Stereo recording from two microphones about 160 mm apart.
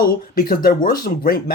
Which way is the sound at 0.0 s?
65° left (ahead or behind).